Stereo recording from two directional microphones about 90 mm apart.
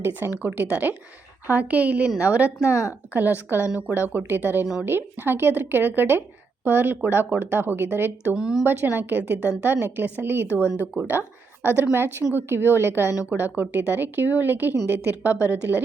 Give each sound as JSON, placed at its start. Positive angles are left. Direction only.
{"t": 0.0, "sound": "a woman's voice", "side_deg": -20}
{"t": 8.4, "sound": "a woman's voice", "side_deg": -5}
{"t": 8.6, "sound": "speech", "side_deg": -25}
{"t": 10.5, "sound": "speech", "side_deg": 25}
{"t": 10.9, "sound": "speech", "side_deg": -15}